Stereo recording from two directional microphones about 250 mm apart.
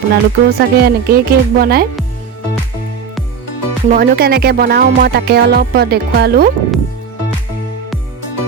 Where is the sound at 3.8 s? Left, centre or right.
Right.